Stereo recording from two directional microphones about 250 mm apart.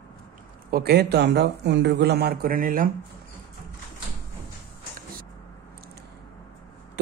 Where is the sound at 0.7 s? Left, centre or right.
Right.